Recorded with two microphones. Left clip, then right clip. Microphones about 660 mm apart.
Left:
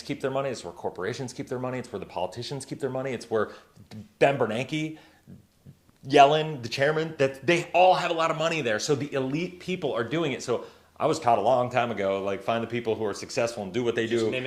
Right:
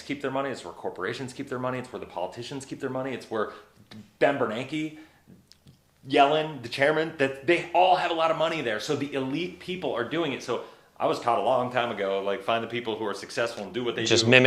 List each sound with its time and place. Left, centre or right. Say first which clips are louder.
0.1 s speech: left 1 dB; left
6.1 s speech: left 3 dB; left